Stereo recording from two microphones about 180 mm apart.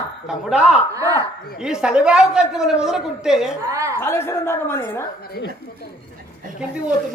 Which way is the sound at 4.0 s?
15° left (ahead or behind).